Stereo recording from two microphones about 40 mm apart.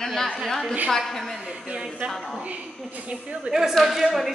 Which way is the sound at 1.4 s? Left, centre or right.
Right.